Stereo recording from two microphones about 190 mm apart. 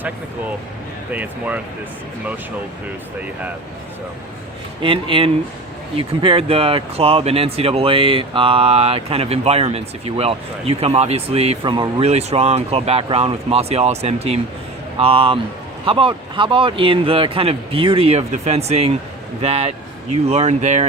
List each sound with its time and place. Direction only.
1.1 s speech: 5° right (ahead or behind)
4.8 s speech: 25° right (ahead or behind)